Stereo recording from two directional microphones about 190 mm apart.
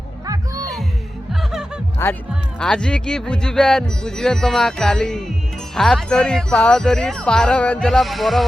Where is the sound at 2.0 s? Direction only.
10° left (ahead or behind).